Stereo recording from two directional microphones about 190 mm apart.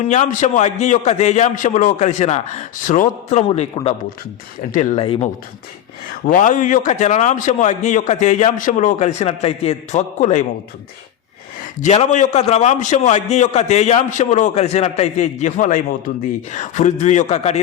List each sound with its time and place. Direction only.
0.0 s a man's voice: 40° left (ahead or behind)
6.2 s a man's voice: 45° left (ahead or behind)
11.8 s a man's voice: 35° left (ahead or behind)